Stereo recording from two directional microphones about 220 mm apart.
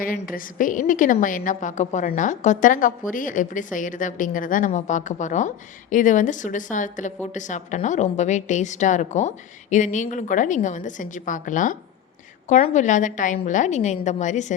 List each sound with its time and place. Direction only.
0.0 s a woman's voice: 40° left (ahead or behind)